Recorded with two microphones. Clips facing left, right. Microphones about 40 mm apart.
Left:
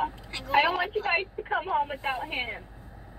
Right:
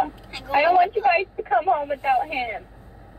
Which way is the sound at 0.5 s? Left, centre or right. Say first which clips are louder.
Right 7 dB; centre.